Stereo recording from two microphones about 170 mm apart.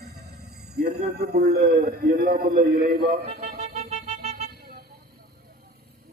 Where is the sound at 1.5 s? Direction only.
60° right (ahead or behind); by 4.4 s 40° right (ahead or behind).